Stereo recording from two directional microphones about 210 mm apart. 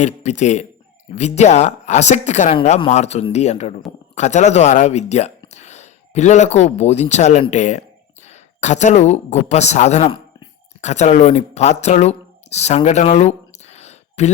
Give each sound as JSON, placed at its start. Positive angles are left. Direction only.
{"t": 0.0, "sound": "speech", "side_deg": 35}